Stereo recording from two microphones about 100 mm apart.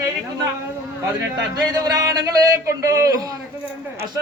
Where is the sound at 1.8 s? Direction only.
40° right (ahead or behind).